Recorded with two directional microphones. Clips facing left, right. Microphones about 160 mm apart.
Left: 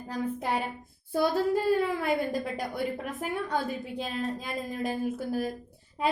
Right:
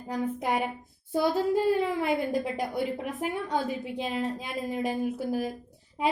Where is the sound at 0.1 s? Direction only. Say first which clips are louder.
Right 2 dB; 15° right (ahead or behind).